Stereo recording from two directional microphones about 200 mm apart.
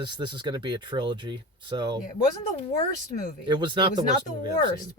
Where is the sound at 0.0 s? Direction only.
20° right (ahead or behind).